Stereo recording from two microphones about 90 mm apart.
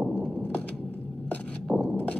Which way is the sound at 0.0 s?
10° left (ahead or behind).